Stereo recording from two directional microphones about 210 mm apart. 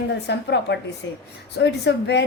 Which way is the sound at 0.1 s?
55° left (ahead or behind).